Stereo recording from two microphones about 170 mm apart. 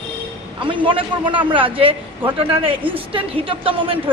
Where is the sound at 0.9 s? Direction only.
30° right (ahead or behind).